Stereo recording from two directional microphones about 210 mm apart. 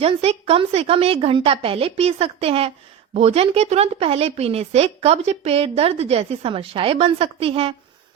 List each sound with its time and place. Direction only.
0.0 s speech: 30° right (ahead or behind)